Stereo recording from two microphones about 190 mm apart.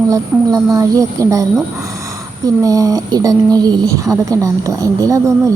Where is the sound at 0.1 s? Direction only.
20° right (ahead or behind).